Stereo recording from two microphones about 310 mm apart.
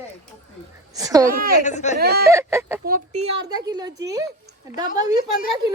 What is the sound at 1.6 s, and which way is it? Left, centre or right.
Speech, left.